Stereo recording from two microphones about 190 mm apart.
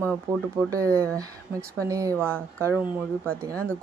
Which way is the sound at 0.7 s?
15° right (ahead or behind).